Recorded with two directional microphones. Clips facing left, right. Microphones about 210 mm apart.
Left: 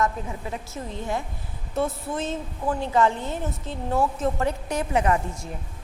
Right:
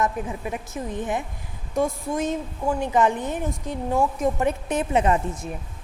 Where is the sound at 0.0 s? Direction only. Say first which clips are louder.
Right 1 dB; 15° right (ahead or behind).